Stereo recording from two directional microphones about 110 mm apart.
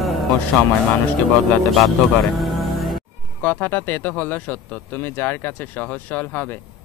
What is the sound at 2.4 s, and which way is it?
Music, centre (ahead or behind).